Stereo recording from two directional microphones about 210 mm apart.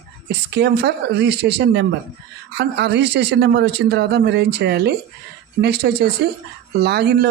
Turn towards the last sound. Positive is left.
turn(degrees=-50)  # may be behind; listen again after turning